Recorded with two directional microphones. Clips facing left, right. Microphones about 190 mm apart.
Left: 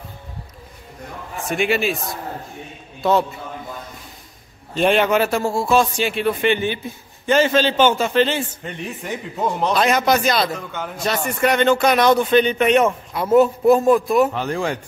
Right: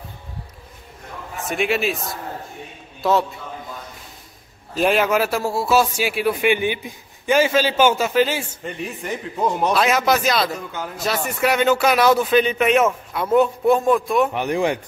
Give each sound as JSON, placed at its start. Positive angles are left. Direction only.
{"t": 1.5, "sound": "speech", "side_deg": 0}
{"t": 3.0, "sound": "a man's voice", "side_deg": 0}
{"t": 4.7, "sound": "a man's voice", "side_deg": -5}
{"t": 14.3, "sound": "a man's voice", "side_deg": -15}